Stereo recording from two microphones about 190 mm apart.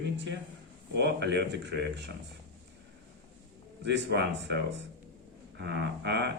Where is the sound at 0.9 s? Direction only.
65° right (ahead or behind).